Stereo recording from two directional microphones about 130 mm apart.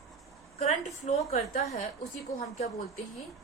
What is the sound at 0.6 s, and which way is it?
A woman's voice, 55° left (ahead or behind).